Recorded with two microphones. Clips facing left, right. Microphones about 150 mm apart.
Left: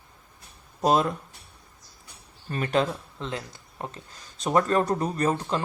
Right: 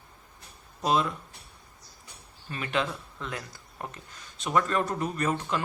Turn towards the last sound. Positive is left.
turn(degrees=35)  # may be behind; listen again after turning